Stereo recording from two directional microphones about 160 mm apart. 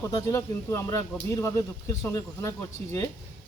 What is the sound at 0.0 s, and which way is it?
Speech, 20° left (ahead or behind).